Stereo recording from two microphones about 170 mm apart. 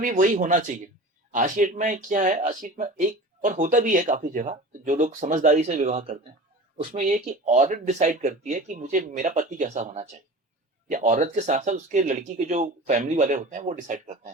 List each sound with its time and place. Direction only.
0.0 s speech: 50° right (ahead or behind)